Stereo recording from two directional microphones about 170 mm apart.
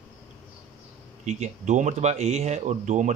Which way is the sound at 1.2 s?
45° right (ahead or behind).